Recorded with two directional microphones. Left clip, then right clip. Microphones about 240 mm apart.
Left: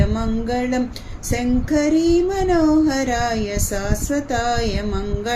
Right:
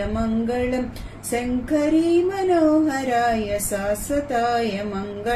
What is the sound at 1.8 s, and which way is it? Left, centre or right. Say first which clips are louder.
Child singing: left 2 dB; left.